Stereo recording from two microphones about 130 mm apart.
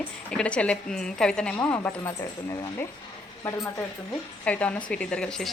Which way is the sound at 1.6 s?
20° left (ahead or behind).